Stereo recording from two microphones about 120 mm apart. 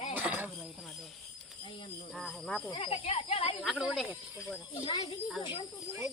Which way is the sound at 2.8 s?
55° left (ahead or behind).